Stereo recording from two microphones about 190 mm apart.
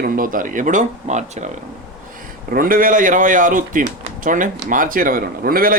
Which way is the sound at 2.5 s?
50° right (ahead or behind).